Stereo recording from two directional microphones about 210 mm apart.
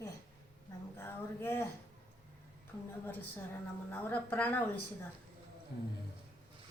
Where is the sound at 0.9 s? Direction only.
10° left (ahead or behind).